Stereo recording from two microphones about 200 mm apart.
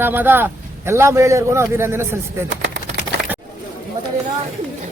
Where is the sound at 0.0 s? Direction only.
10° right (ahead or behind).